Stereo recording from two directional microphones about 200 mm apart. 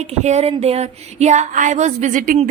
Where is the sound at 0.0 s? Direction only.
35° right (ahead or behind).